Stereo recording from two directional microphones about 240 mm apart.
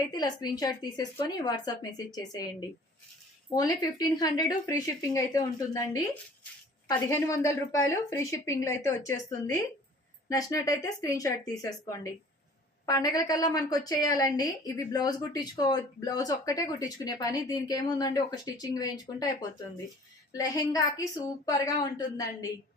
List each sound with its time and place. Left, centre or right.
0.1 s a woman's voice: centre